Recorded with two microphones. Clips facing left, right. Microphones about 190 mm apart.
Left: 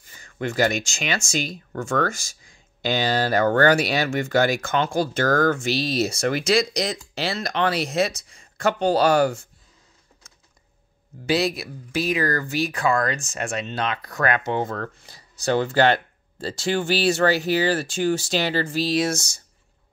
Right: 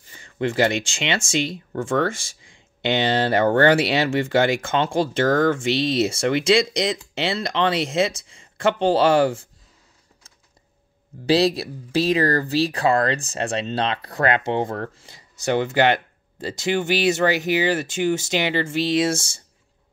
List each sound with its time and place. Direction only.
0.2 s speech: 30° right (ahead or behind)
11.2 s speech: 35° right (ahead or behind)